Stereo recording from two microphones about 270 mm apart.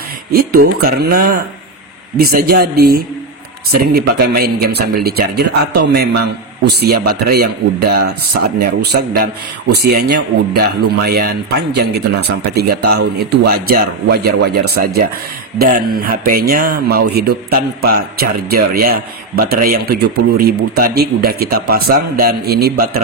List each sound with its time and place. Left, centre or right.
0.3 s speech: right
15.6 s speech: right